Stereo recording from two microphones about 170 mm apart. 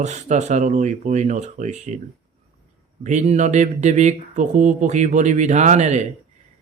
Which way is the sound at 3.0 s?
45° right (ahead or behind).